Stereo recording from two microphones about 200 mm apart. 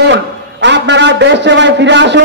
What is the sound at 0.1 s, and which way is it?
A man's voice, 60° right (ahead or behind).